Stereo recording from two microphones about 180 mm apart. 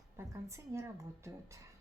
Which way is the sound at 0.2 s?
15° right (ahead or behind).